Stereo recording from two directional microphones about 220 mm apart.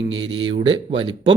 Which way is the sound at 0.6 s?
25° right (ahead or behind).